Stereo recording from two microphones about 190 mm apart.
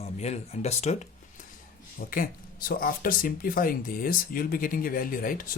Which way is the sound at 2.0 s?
50° left (ahead or behind).